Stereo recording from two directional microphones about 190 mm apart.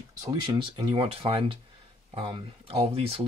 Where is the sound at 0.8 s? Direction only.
30° right (ahead or behind).